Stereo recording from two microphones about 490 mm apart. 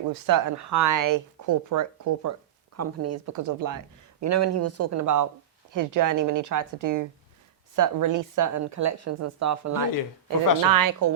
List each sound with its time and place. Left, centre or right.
0.1 s speech: right